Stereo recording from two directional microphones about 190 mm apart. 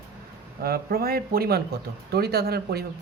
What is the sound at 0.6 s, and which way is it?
Speech, 55° right (ahead or behind).